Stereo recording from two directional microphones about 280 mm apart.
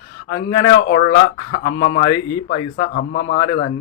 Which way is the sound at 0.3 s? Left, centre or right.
Left.